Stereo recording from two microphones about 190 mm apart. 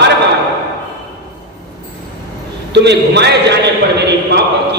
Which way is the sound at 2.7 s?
60° right (ahead or behind).